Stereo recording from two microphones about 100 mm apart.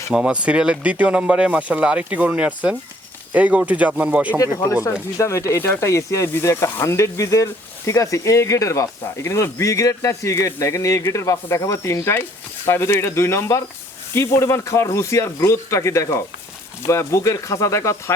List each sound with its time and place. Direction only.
0.1 s speech: 10° right (ahead or behind)
4.4 s speech: 30° left (ahead or behind)